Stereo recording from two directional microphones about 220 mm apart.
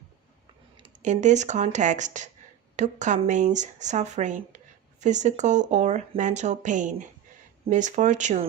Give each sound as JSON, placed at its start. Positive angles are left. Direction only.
{"t": 0.8, "sound": "speech", "side_deg": -35}